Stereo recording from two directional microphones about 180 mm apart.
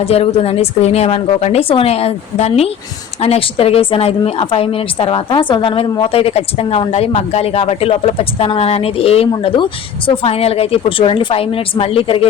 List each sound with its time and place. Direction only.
0.0 s a woman's voice: 35° left (ahead or behind)